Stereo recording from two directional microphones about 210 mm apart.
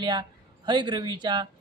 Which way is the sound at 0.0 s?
20° right (ahead or behind).